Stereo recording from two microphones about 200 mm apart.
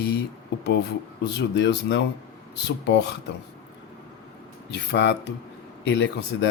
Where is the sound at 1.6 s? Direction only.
60° left (ahead or behind).